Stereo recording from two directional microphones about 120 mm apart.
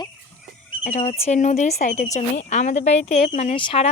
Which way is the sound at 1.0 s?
60° left (ahead or behind).